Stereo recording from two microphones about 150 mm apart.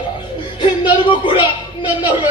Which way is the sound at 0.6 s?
35° left (ahead or behind).